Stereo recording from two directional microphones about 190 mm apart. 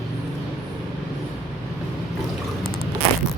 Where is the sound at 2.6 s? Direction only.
50° right (ahead or behind).